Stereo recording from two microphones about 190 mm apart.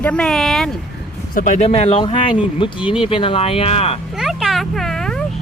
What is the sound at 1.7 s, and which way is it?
Speech, 30° left (ahead or behind).